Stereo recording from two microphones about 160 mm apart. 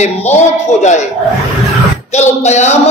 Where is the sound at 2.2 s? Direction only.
45° left (ahead or behind).